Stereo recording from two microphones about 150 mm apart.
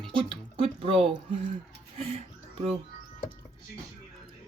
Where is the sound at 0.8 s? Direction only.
40° right (ahead or behind).